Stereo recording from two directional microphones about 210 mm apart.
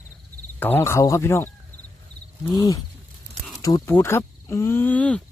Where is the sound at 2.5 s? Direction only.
15° left (ahead or behind).